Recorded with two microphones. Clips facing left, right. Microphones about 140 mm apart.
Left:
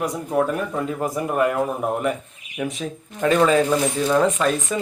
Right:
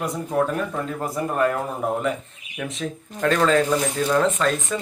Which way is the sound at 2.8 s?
10° left (ahead or behind).